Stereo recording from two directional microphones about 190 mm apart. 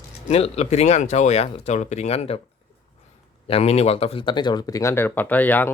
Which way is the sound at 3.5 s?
35° left (ahead or behind).